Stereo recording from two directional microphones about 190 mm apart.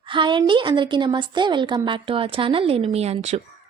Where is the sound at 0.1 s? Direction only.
25° right (ahead or behind).